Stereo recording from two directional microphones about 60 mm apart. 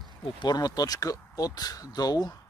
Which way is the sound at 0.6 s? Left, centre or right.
Left.